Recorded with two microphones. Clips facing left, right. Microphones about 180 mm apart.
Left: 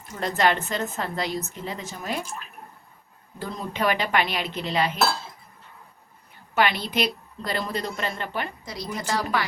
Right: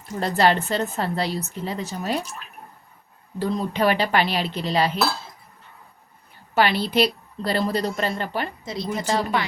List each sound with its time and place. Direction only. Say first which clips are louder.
0.2 s a woman's voice: right 3 dB; 35° right (ahead or behind)
3.3 s a woman's voice: right 7 dB; 35° right (ahead or behind)
6.5 s a woman's voice: right 3 dB; 35° right (ahead or behind)
8.6 s a woman's voice: right 5 dB; 25° right (ahead or behind)